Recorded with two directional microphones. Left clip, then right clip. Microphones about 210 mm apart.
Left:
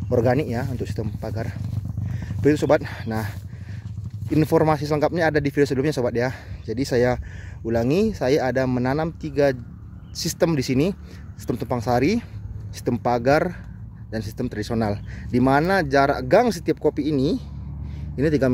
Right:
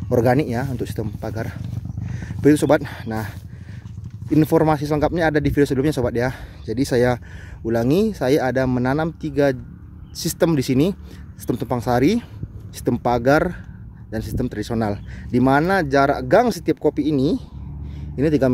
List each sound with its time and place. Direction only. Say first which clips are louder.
0.1 s speech: right 3 dB; 20° right (ahead or behind)